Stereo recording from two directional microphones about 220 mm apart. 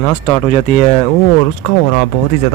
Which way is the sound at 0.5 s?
25° left (ahead or behind).